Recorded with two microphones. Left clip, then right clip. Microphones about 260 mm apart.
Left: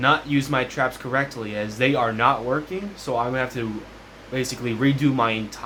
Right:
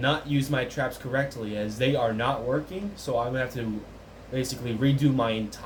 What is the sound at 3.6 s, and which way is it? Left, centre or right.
Speech, centre.